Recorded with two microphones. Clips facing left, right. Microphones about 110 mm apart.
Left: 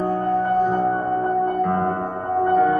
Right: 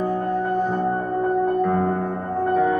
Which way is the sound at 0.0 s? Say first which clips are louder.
Left 2 dB; 45° left (ahead or behind).